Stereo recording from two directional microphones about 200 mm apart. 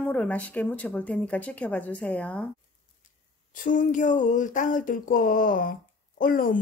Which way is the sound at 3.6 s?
40° left (ahead or behind).